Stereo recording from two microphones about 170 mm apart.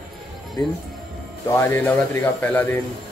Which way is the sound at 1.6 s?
10° left (ahead or behind).